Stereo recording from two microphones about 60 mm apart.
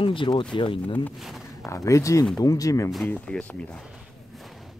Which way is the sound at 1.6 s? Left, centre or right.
Left.